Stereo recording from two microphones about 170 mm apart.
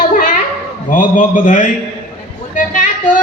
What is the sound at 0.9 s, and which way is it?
Speech, 50° left (ahead or behind).